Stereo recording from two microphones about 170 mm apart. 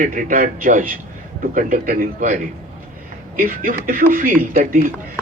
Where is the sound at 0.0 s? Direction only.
50° right (ahead or behind).